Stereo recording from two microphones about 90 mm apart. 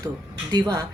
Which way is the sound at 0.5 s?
55° right (ahead or behind).